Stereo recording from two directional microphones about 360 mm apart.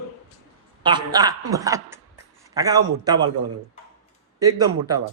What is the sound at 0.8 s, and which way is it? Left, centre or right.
Speech, centre.